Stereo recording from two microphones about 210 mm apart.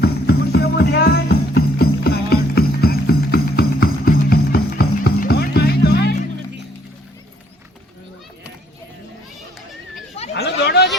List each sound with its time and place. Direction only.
0.0 s music: 50° left (ahead or behind)
10.3 s chatter: 50° left (ahead or behind)